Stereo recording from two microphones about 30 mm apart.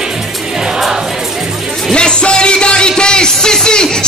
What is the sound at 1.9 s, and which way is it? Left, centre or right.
Music, left.